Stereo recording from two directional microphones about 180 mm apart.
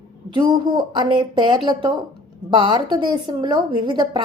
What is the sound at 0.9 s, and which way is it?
A woman's voice, 25° right (ahead or behind).